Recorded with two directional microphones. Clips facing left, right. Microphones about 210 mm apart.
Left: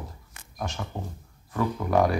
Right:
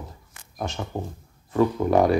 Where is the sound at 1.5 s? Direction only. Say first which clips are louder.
Right 5 dB; 25° right (ahead or behind).